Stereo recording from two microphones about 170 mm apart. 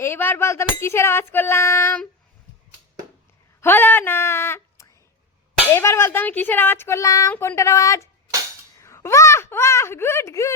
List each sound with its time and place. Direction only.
0.0 s speech: 15° left (ahead or behind)
3.6 s speech: 10° left (ahead or behind)